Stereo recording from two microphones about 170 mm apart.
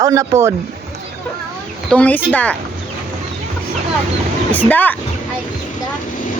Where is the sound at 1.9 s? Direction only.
10° left (ahead or behind).